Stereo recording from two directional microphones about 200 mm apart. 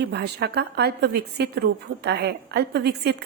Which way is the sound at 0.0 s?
55° right (ahead or behind).